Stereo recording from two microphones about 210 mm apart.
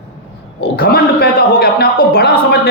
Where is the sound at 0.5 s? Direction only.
45° left (ahead or behind).